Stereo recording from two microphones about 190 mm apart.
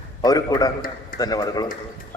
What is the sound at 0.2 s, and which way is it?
A man's voice, 20° left (ahead or behind).